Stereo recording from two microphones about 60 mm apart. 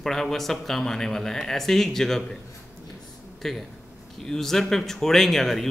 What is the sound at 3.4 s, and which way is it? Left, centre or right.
Speech, centre.